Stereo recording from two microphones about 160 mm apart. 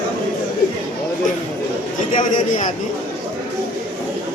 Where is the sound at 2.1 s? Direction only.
50° left (ahead or behind).